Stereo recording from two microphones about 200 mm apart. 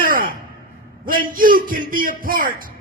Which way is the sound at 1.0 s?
45° right (ahead or behind).